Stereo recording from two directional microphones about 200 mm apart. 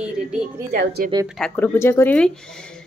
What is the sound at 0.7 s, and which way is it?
Speech, 50° right (ahead or behind).